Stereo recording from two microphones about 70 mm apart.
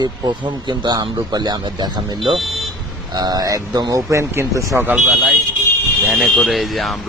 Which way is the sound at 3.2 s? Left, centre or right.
Right.